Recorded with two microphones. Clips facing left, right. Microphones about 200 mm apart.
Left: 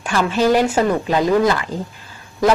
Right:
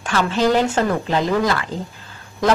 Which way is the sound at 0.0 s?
15° left (ahead or behind).